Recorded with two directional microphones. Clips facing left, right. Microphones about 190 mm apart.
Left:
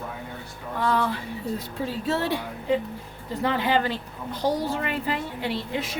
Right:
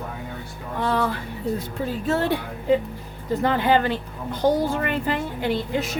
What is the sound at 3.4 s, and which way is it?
A woman's voice, 50° right (ahead or behind).